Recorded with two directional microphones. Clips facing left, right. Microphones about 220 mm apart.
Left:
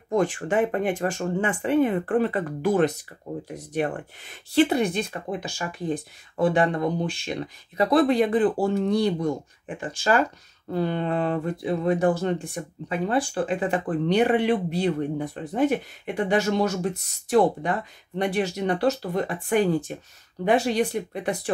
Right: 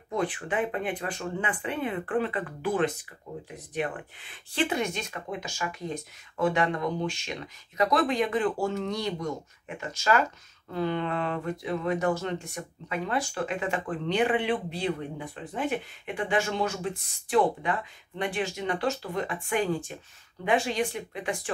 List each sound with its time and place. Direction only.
0.1 s speech: 45° left (ahead or behind)